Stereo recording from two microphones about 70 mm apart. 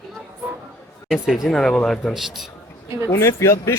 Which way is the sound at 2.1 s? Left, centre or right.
Centre.